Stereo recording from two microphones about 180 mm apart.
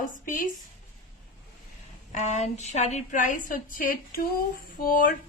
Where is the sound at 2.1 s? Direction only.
40° left (ahead or behind).